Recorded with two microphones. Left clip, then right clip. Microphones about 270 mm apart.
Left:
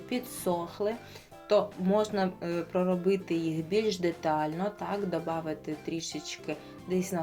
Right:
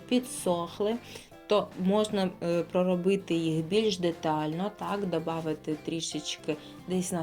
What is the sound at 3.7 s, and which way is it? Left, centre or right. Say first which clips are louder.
Speech: right 1 dB; centre.